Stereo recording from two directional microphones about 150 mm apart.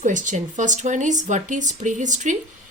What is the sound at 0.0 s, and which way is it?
Speech, 60° right (ahead or behind).